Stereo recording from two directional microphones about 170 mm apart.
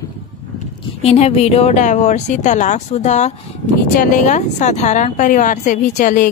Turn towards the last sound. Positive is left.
turn(degrees=50)  # may be behind; listen again after turning